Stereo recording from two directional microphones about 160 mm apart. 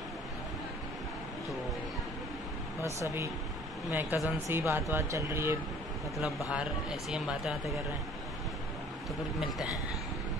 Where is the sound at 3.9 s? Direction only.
10° right (ahead or behind).